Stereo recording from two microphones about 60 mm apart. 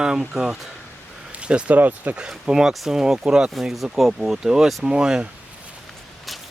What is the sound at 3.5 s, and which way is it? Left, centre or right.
Speech, centre.